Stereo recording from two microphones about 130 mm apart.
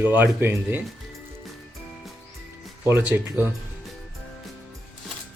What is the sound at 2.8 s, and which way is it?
Speech, 15° right (ahead or behind).